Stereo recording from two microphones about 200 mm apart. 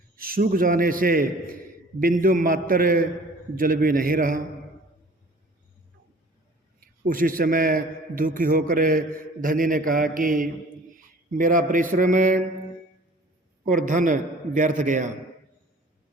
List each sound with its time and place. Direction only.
0.2 s a man's voice: 45° right (ahead or behind)
6.7 s a man's voice: 45° right (ahead or behind)
13.7 s a man's voice: 40° right (ahead or behind)